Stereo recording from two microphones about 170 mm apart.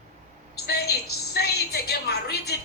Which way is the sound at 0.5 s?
70° left (ahead or behind).